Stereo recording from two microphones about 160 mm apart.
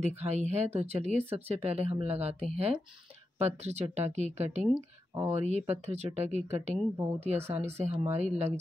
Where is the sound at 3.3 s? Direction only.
40° right (ahead or behind).